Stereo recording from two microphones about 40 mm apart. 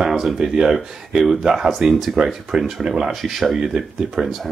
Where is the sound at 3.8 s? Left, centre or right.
Centre.